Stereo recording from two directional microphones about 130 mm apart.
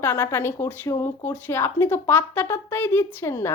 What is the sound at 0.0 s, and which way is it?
A woman's voice, 15° left (ahead or behind).